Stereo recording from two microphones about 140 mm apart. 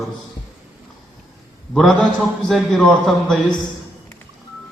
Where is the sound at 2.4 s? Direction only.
Centre (ahead or behind).